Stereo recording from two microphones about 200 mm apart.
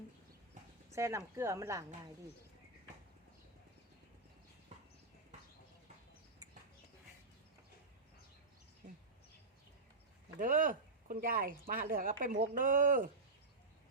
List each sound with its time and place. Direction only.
0.9 s speech: 15° right (ahead or behind)
10.3 s speech: 45° right (ahead or behind)